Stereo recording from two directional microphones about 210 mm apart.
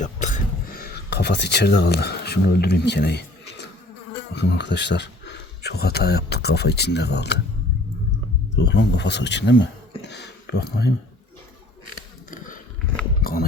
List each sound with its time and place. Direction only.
0.0 s a sound: 35° left (ahead or behind)
1.1 s speech: 55° left (ahead or behind)
8.5 s speech: 55° left (ahead or behind)